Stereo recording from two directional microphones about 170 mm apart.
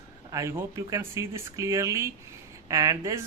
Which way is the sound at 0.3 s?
20° right (ahead or behind).